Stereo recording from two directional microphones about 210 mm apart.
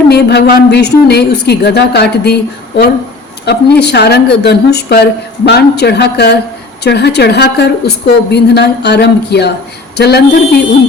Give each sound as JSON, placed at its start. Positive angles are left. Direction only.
{"t": 0.1, "sound": "a woman's voice", "side_deg": 50}